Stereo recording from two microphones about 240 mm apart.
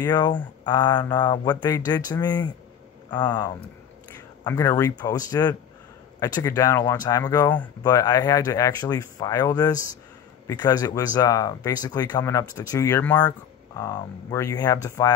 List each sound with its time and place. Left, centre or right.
0.0 s speech: centre